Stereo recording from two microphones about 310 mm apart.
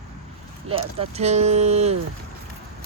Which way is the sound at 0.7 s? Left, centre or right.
Centre.